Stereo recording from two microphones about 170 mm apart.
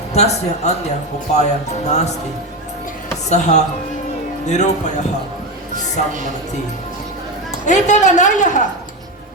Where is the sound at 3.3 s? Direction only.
45° left (ahead or behind).